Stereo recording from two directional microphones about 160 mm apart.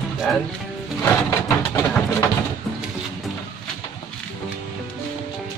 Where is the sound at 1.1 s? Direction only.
20° left (ahead or behind).